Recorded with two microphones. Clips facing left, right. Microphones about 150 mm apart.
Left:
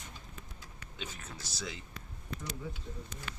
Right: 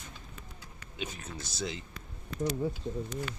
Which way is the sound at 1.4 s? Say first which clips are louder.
Right 6 dB; 25° right (ahead or behind).